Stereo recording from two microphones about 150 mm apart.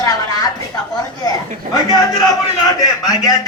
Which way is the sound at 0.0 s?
25° left (ahead or behind).